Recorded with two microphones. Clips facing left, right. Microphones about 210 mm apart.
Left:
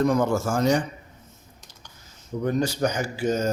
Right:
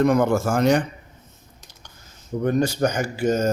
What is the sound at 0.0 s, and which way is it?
Speech, 60° right (ahead or behind).